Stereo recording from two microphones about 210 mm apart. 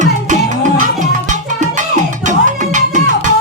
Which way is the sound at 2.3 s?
35° right (ahead or behind).